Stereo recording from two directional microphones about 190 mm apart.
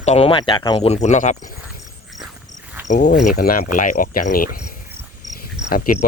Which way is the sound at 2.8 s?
40° left (ahead or behind).